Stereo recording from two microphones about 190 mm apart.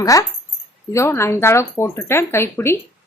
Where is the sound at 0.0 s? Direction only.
20° left (ahead or behind).